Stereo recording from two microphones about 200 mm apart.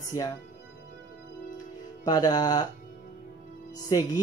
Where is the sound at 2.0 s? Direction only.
20° left (ahead or behind).